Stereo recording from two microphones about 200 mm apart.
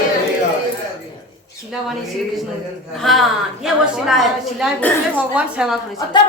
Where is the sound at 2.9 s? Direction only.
Centre (ahead or behind).